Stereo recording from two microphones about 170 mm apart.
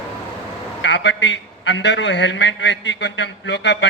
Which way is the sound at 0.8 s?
90° left.